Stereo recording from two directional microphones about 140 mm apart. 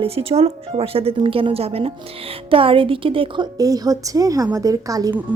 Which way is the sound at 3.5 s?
25° right (ahead or behind).